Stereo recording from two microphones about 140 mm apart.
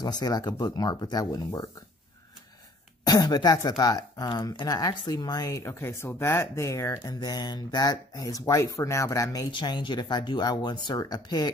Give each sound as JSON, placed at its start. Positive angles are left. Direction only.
{"t": 0.0, "sound": "speech", "side_deg": 30}
{"t": 3.1, "sound": "speech", "side_deg": 30}